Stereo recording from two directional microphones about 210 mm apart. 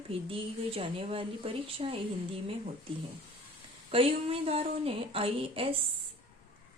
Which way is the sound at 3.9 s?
25° right (ahead or behind).